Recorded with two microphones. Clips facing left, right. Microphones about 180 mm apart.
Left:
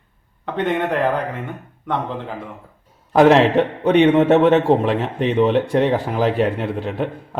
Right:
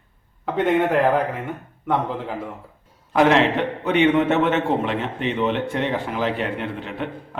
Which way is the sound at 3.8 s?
35° left (ahead or behind).